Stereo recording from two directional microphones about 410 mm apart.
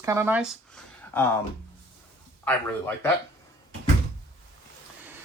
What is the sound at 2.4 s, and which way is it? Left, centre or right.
Speech, centre.